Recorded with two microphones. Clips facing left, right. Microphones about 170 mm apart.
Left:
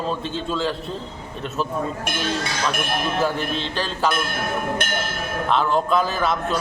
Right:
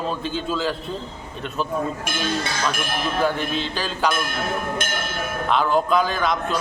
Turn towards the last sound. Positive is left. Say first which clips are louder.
# even
turn(degrees=0)  # may be behind; listen again after turning